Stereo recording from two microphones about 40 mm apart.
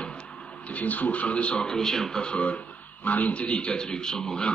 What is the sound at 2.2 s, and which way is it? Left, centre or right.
Speech, left.